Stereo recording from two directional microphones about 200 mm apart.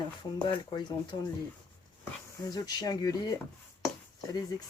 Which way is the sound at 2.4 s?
20° left (ahead or behind).